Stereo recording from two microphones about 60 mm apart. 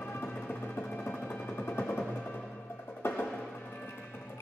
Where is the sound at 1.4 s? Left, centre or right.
Left.